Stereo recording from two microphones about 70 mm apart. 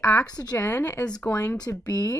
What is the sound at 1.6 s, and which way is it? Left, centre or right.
Speech, left.